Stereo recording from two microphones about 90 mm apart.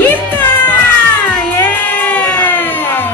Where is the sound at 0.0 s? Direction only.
20° left (ahead or behind).